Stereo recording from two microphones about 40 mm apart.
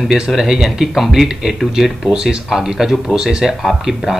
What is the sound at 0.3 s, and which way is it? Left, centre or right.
Speech, centre.